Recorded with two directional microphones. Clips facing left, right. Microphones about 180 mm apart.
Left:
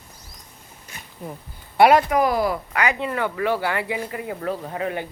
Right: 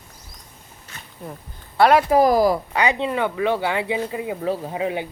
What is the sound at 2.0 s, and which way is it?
Speech, 35° right (ahead or behind).